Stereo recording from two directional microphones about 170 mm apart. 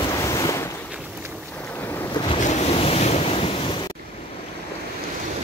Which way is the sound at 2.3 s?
45° left (ahead or behind).